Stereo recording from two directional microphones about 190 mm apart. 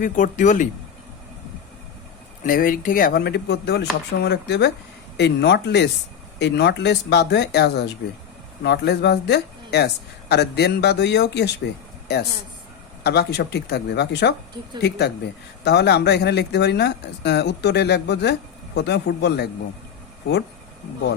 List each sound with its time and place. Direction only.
0.0 s speech: 40° left (ahead or behind)
2.4 s speech: 45° left (ahead or behind); by 19.5 s 65° left (ahead or behind)